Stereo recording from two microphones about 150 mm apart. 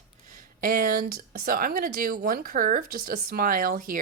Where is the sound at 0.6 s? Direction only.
65° right (ahead or behind).